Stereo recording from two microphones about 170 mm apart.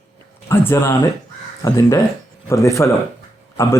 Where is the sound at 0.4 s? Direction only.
15° left (ahead or behind).